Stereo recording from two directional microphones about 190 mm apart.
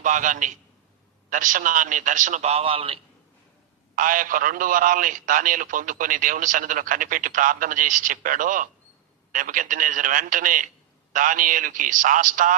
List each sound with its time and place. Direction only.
0.0 s a man's voice: 40° right (ahead or behind)
3.9 s a man's voice: 45° right (ahead or behind)